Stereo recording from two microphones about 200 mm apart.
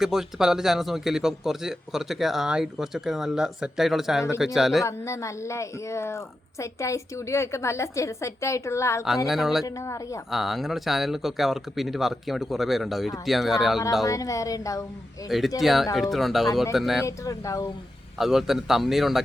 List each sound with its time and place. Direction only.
0.0 s a man's voice: centre (ahead or behind)
4.9 s a woman's voice: 15° left (ahead or behind)
9.2 s a man's voice: centre (ahead or behind)
9.6 s a woman's voice: 15° left (ahead or behind)
10.3 s a man's voice: centre (ahead or behind)
14.0 s a woman's voice: 15° left (ahead or behind)
15.3 s a man's voice: centre (ahead or behind)
17.1 s a woman's voice: 15° left (ahead or behind)
18.2 s a man's voice: centre (ahead or behind)